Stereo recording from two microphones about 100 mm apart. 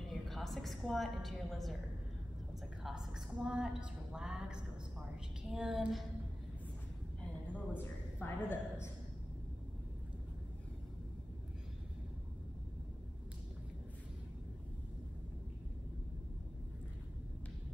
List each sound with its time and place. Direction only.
0.3 s a woman's voice: centre (ahead or behind)
2.8 s a woman's voice: 5° right (ahead or behind)
5.5 s a sound: 5° right (ahead or behind)
7.2 s a woman's voice: 15° left (ahead or behind)